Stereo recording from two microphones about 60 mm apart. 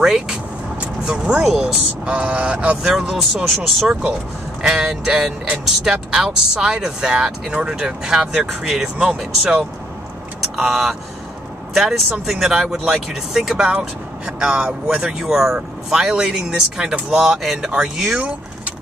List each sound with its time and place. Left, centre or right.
0.0 s speech: centre
2.0 s vehicle: right
2.8 s speech: centre
13.7 s speech: centre